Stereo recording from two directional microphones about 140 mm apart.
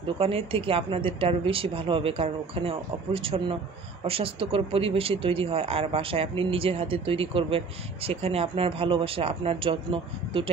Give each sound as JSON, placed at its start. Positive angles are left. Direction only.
{"t": 0.0, "sound": "speech", "side_deg": -45}